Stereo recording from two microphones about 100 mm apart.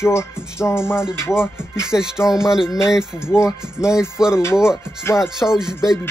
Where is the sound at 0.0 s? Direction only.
25° left (ahead or behind).